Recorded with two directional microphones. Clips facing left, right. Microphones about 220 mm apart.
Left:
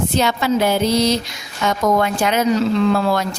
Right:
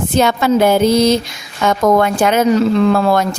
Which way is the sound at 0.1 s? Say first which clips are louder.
Right 8 dB; 50° right (ahead or behind).